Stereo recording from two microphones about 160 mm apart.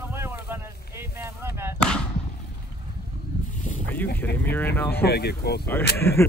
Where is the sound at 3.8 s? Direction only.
10° left (ahead or behind).